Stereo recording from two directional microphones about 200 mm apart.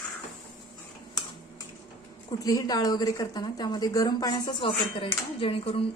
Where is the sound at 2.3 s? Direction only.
20° left (ahead or behind).